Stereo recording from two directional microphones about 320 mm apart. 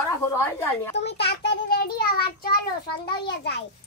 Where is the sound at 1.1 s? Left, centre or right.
Left.